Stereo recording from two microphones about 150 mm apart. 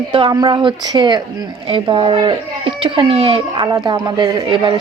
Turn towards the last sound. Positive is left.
turn(degrees=-30)  # may be behind; listen again after turning